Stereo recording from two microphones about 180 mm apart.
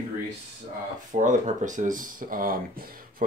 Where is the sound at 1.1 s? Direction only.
45° right (ahead or behind).